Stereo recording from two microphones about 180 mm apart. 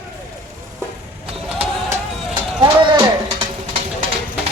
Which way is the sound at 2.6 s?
25° right (ahead or behind).